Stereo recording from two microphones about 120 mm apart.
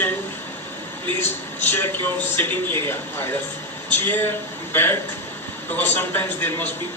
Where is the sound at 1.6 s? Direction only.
15° left (ahead or behind).